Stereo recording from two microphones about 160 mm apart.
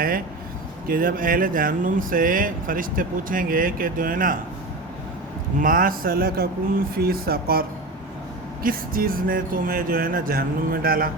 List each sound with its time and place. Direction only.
0.9 s speech: 65° right (ahead or behind)
5.5 s speech: 60° right (ahead or behind)
8.6 s speech: 65° right (ahead or behind)